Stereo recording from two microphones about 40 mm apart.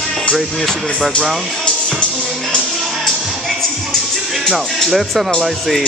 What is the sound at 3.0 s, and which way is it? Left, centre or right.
Music, centre.